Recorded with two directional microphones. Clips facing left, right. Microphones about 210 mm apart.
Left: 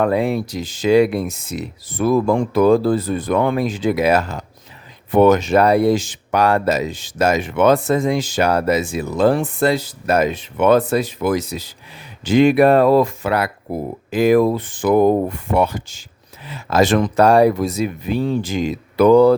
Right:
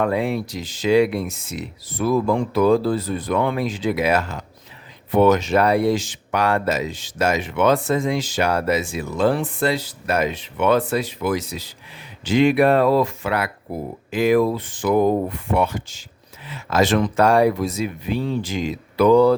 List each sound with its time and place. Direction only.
0.0 s speech: 40° left (ahead or behind)
5.1 s speech: 50° left (ahead or behind)